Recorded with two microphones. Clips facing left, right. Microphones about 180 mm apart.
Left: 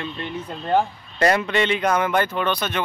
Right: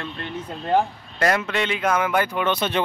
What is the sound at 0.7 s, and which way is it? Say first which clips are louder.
Speech: even; centre (ahead or behind).